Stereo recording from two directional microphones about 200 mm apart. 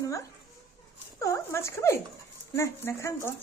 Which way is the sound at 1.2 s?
15° left (ahead or behind).